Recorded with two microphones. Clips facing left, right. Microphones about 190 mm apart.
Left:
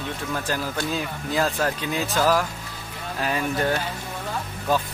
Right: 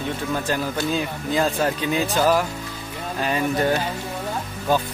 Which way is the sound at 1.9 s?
Centre (ahead or behind).